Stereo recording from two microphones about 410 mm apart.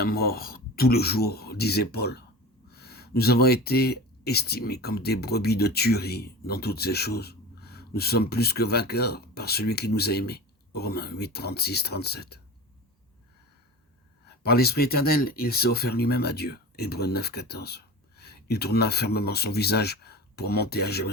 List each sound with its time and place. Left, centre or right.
0.0 s speech: left
14.3 s speech: left